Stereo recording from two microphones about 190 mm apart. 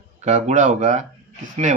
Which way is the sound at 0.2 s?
40° right (ahead or behind).